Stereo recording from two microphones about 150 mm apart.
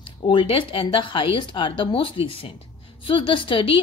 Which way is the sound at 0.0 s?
35° left (ahead or behind).